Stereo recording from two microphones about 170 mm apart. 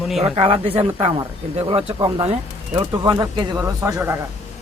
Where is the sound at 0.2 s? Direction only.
35° right (ahead or behind).